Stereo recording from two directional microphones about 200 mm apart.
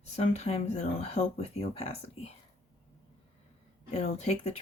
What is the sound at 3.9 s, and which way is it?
Speech, 30° left (ahead or behind).